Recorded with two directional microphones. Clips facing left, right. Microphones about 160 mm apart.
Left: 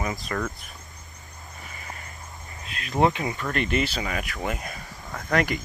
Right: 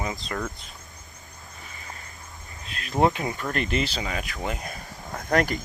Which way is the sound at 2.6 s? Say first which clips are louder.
Even; 40° right (ahead or behind).